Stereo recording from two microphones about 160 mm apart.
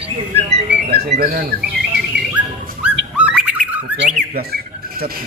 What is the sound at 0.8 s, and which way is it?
Whistling, 85° right.